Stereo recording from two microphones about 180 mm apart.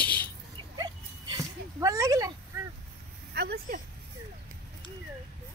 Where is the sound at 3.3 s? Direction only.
60° right (ahead or behind).